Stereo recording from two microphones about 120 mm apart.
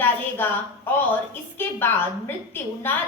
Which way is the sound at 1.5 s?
20° left (ahead or behind).